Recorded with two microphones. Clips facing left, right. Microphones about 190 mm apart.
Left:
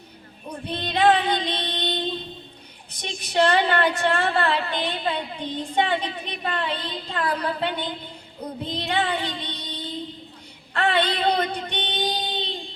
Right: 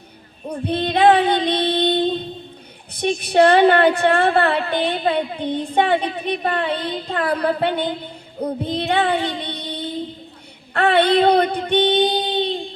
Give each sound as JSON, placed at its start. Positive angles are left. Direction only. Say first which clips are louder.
{"t": 0.7, "sound": "child singing", "louder": "right 5 dB", "side_deg": -50}
{"t": 3.0, "sound": "a woman's voice", "louder": "right 7 dB", "side_deg": -60}